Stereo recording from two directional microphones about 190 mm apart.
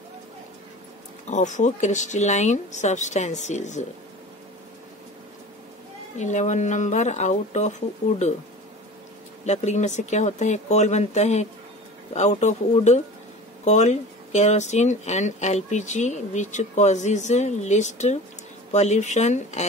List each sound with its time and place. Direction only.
1.3 s speech: 40° left (ahead or behind)
6.1 s speech: 40° left (ahead or behind)
9.5 s speech: 35° left (ahead or behind)